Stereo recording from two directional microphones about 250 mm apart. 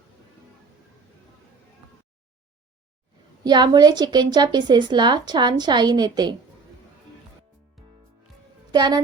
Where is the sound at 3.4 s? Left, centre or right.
Centre.